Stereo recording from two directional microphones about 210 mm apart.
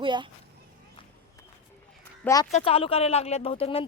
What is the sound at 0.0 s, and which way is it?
Speech, 20° right (ahead or behind).